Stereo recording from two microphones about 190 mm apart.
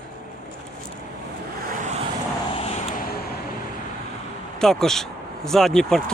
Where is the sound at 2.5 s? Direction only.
30° left (ahead or behind).